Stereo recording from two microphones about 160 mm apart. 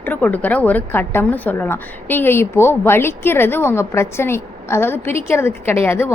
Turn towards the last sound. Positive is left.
turn(degrees=15)  # may be behind; listen again after turning